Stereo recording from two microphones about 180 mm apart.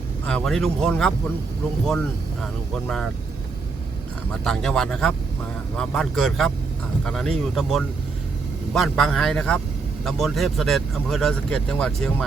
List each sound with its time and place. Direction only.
0.3 s speech: 5° left (ahead or behind)
2.8 s speech: centre (ahead or behind)
4.3 s speech: 5° left (ahead or behind)